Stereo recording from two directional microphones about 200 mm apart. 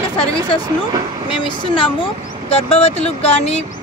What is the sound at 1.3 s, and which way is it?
Speech, 25° left (ahead or behind).